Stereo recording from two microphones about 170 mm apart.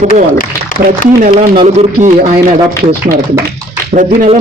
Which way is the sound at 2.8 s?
60° right (ahead or behind).